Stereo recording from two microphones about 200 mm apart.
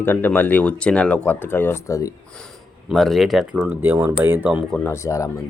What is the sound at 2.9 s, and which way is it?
Speech, centre (ahead or behind).